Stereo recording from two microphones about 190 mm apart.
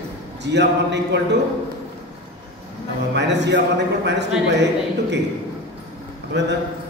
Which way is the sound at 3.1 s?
65° right (ahead or behind).